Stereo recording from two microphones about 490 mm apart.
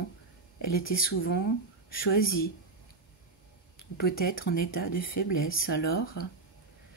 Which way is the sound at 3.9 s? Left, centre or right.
Centre.